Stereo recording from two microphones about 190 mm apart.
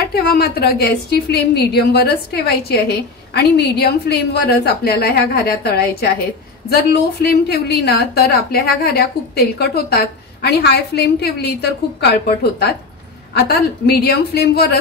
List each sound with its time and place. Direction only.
0.1 s a woman's voice: 55° left (ahead or behind)
13.3 s a woman's voice: 55° left (ahead or behind)